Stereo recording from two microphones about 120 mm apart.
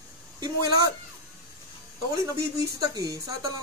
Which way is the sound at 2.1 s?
30° right (ahead or behind).